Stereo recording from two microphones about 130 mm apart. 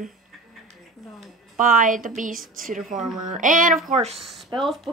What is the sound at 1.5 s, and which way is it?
Speech, 90° right.